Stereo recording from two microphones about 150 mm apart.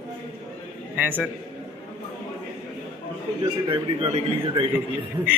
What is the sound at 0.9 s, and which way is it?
Speech, 10° right (ahead or behind).